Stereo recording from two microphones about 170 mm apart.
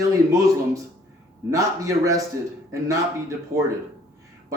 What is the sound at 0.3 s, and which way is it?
A man's voice, 20° right (ahead or behind).